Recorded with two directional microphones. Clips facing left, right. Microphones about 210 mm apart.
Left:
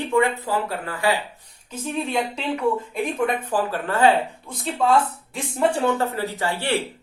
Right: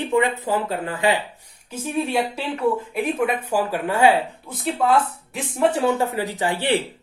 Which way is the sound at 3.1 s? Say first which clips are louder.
Even; 5° right (ahead or behind).